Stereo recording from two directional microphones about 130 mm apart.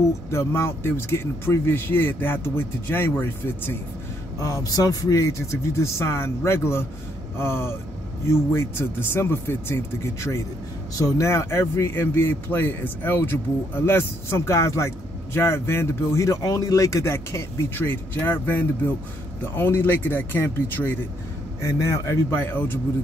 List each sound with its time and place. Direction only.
0.3 s speech: 20° left (ahead or behind)